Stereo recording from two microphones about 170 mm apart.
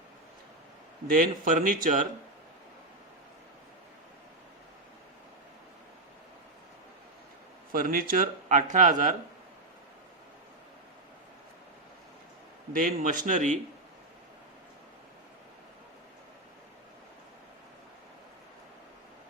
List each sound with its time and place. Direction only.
1.0 s speech: 55° right (ahead or behind)
7.7 s speech: 55° right (ahead or behind)
12.7 s speech: 55° right (ahead or behind)